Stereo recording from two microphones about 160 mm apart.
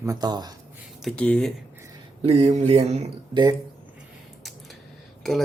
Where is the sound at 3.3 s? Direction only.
30° right (ahead or behind).